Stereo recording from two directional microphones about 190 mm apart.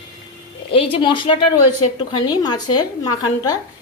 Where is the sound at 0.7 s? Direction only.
30° left (ahead or behind).